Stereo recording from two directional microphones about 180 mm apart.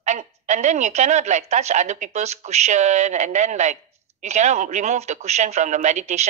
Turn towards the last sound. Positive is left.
turn(degrees=-40)  # may be behind; listen again after turning